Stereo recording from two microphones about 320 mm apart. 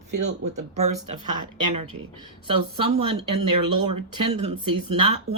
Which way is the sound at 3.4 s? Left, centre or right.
Right.